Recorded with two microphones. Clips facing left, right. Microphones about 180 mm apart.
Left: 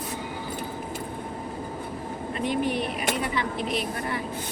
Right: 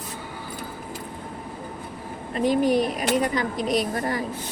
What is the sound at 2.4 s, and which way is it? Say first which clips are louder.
Speech: right 7 dB; 40° right (ahead or behind).